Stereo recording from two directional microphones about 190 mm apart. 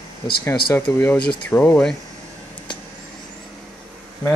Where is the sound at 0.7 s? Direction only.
10° left (ahead or behind).